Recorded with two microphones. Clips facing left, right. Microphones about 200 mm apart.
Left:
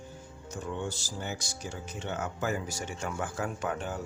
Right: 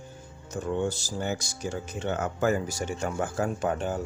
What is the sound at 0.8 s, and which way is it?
Speech, 45° right (ahead or behind).